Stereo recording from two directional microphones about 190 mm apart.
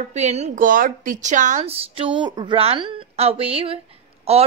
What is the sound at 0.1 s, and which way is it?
Speech, 35° right (ahead or behind).